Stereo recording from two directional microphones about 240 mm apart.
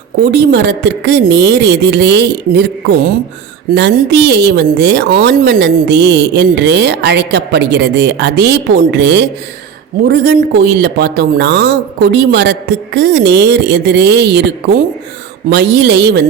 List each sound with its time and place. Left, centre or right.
0.3 s a woman's voice: right
15.4 s a woman's voice: right